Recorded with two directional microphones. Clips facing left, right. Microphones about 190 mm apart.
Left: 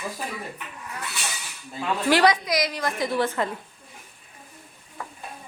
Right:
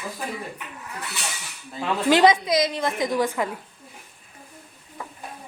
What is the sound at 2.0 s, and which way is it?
A woman's voice, 20° right (ahead or behind).